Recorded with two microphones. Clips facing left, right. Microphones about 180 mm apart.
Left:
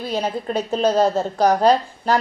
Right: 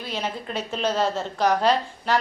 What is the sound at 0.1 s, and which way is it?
A woman's voice, 40° left (ahead or behind).